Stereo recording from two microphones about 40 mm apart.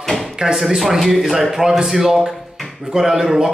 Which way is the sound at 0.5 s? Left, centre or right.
Centre.